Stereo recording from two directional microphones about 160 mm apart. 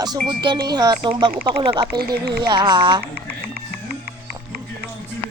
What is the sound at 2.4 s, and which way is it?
Speech, 25° right (ahead or behind).